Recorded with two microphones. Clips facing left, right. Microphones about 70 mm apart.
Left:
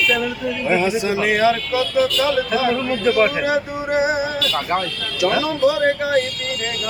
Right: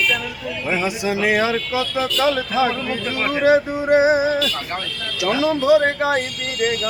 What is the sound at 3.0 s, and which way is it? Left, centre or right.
Speech, centre.